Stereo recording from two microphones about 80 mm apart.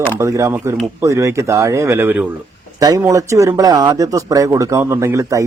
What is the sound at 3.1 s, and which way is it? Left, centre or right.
A man's voice, right.